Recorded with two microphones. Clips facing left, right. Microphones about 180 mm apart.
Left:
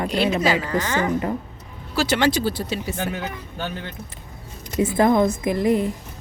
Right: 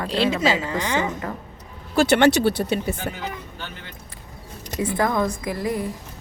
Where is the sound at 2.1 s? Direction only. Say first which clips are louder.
Right 3 dB; 60° right (ahead or behind).